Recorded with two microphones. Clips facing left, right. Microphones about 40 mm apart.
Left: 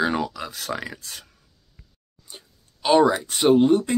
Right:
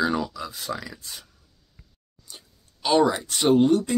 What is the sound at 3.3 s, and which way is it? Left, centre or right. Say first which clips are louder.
Speech: left 1 dB; centre.